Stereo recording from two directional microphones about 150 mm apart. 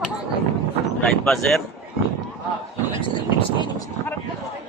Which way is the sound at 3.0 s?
35° left (ahead or behind).